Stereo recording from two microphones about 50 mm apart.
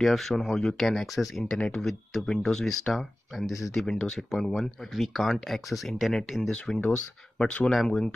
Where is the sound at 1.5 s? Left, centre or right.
Left.